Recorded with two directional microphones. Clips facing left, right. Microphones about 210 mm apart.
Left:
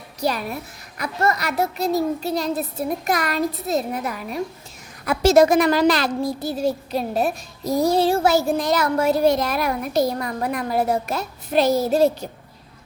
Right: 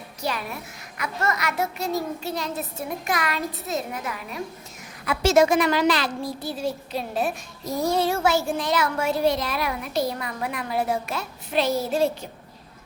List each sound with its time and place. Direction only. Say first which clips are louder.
0.2 s a woman's voice: left 6 dB; 40° left (ahead or behind)